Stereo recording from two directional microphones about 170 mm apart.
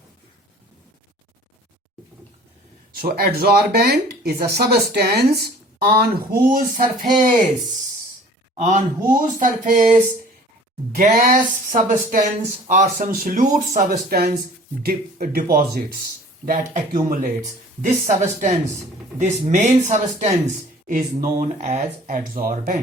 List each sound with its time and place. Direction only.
2.9 s speech: 60° right (ahead or behind)
8.5 s a woman's voice: 45° right (ahead or behind); by 16.0 s 60° right (ahead or behind)
16.5 s a woman's voice: 50° right (ahead or behind)
17.1 s speech: 60° right (ahead or behind)
17.4 s a woman's voice: 45° right (ahead or behind)
21.2 s a woman's voice: 45° right (ahead or behind)